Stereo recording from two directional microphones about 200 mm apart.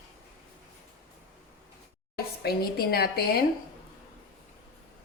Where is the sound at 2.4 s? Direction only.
50° left (ahead or behind).